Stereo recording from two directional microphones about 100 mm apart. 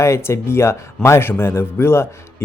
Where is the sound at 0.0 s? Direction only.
25° left (ahead or behind).